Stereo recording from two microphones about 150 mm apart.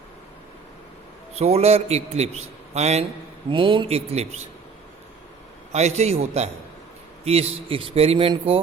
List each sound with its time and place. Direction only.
1.4 s a man's voice: 45° right (ahead or behind)
3.5 s a man's voice: 35° right (ahead or behind)
5.7 s a man's voice: 45° right (ahead or behind)